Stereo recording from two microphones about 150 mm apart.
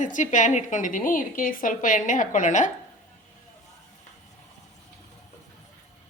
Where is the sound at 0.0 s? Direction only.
55° left (ahead or behind).